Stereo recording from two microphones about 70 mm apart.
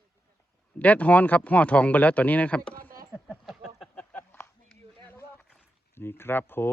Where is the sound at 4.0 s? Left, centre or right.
Left.